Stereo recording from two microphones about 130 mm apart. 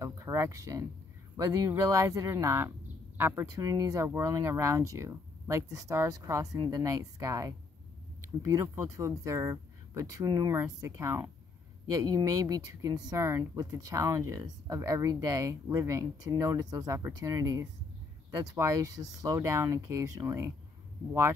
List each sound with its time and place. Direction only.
0.0 s speech: 25° right (ahead or behind)
3.6 s speech: 25° right (ahead or behind)